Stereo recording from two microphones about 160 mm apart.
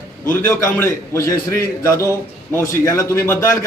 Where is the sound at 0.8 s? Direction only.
15° left (ahead or behind).